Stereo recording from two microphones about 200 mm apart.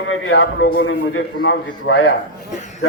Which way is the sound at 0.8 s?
85° left.